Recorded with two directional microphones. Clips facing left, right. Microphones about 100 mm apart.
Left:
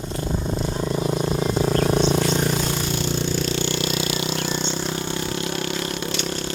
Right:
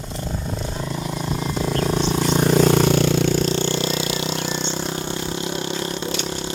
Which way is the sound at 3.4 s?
30° right (ahead or behind).